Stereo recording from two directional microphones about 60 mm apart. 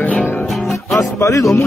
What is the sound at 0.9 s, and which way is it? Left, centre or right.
Speech, left.